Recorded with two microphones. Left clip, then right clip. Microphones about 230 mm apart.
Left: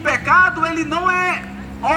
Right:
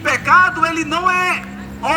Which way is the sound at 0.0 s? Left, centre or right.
Right.